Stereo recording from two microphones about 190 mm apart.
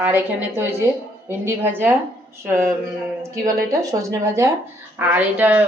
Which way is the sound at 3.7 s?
15° right (ahead or behind).